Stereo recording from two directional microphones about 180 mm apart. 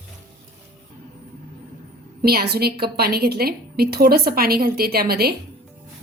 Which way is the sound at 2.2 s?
60° right (ahead or behind).